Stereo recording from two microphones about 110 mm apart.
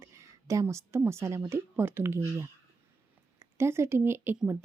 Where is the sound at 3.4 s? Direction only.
25° right (ahead or behind).